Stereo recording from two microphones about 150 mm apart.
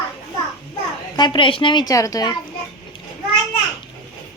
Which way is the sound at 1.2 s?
35° left (ahead or behind).